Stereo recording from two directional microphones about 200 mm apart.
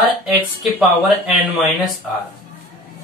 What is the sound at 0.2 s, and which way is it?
Speech, centre (ahead or behind).